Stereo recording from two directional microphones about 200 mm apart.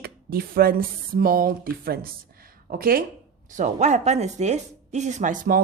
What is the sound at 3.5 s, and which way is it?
Speech, 35° right (ahead or behind).